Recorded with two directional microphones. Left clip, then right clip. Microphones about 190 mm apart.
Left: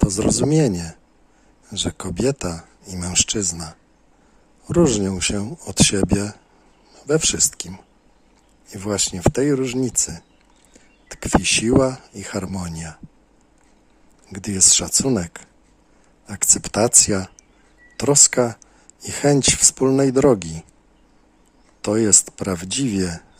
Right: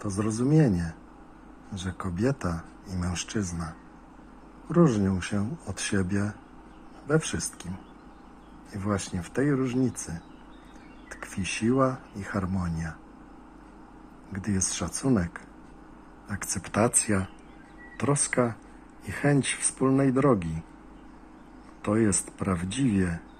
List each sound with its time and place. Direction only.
0.2 s speech: 70° left (ahead or behind)
0.5 s speech: 60° left (ahead or behind)
1.8 s speech: 75° left (ahead or behind)
2.5 s speech: 90° left; by 3.7 s 60° left (ahead or behind)
4.7 s speech: 60° left (ahead or behind)
8.7 s speech: 90° left
11.1 s speech: 80° left
14.3 s speech: 75° left (ahead or behind)
14.8 s speech: 60° left (ahead or behind)
17.9 s speech: 85° left
21.8 s speech: 80° left